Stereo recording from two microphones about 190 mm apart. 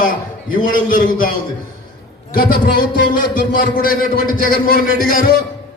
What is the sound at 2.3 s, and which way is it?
A man's voice, 50° left (ahead or behind).